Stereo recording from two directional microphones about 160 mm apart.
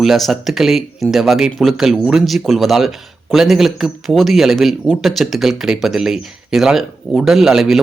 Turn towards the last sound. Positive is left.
turn(degrees=0)  # may be behind; listen again after turning